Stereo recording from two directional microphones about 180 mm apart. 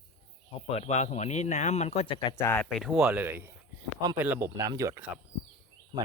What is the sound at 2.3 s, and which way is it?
Speech, 10° left (ahead or behind).